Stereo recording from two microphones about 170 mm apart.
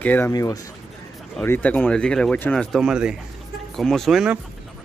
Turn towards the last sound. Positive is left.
turn(degrees=0)  # may be behind; listen again after turning